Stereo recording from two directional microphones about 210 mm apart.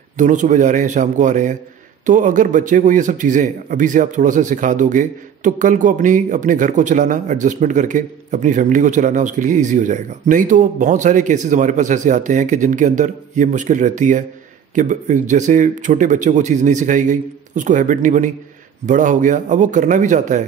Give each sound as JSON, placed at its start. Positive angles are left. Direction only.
{"t": 0.2, "sound": "a man's voice", "side_deg": -35}